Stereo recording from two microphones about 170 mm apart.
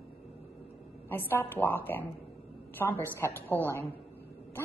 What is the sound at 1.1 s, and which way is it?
Speech, 10° left (ahead or behind).